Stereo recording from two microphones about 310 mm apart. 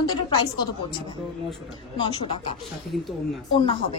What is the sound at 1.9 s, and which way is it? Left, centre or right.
Speech, centre.